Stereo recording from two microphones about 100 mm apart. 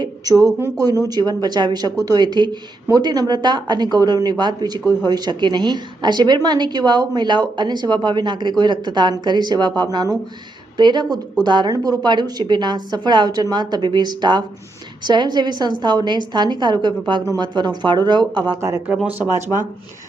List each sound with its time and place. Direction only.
0.0 s a sound: 35° right (ahead or behind)
1.1 s a woman's voice: 40° right (ahead or behind)
18.9 s speech: 15° right (ahead or behind)